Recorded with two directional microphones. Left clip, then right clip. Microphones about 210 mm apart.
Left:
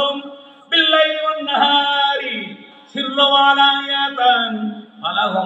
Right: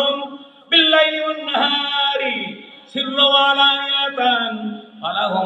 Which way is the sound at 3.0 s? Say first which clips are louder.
Left 1 dB; 40° right (ahead or behind).